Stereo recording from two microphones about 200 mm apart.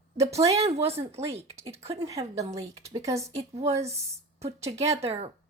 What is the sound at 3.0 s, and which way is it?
Speech, 15° right (ahead or behind).